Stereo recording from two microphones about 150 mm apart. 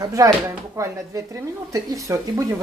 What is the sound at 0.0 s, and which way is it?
Speech, 20° right (ahead or behind).